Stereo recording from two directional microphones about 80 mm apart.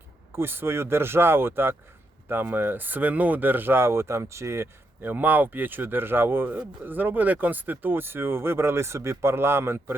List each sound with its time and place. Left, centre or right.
0.3 s speech: right